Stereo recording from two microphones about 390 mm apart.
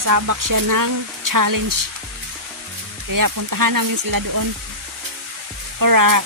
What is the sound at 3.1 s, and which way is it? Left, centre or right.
Speech, right.